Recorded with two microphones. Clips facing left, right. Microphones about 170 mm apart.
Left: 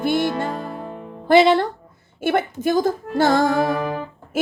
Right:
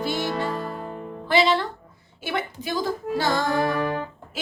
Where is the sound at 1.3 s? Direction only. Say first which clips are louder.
Left 7 dB; 50° left (ahead or behind).